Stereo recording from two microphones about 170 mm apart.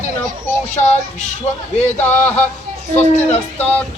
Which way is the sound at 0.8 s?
45° left (ahead or behind).